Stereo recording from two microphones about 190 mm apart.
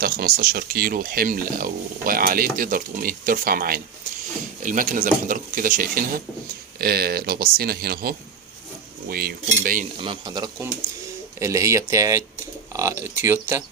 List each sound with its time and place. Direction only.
0.0 s speech: 50° right (ahead or behind)
10.0 s speech: 25° right (ahead or behind)